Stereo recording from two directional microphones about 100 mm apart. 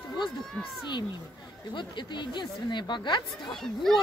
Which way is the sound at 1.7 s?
50° left (ahead or behind).